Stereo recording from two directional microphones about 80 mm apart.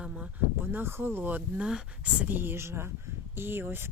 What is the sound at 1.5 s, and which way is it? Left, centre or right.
Speech, centre.